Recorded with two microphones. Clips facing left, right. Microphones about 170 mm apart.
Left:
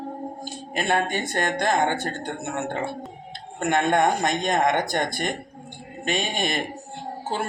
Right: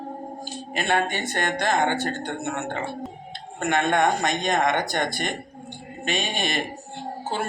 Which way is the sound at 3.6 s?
45° left (ahead or behind).